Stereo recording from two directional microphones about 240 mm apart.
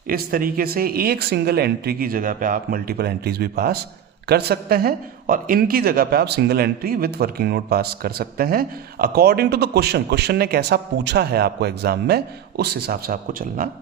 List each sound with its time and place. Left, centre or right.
0.1 s speech: right